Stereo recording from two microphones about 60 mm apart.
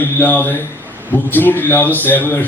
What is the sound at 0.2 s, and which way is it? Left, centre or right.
A man's voice, left.